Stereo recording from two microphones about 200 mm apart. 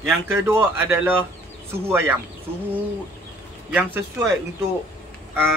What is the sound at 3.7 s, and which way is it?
Speech, 10° right (ahead or behind).